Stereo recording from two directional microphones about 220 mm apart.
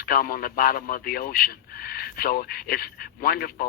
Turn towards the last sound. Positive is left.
turn(degrees=40)  # may be behind; listen again after turning